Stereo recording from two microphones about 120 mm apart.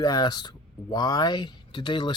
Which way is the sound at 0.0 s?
35° left (ahead or behind).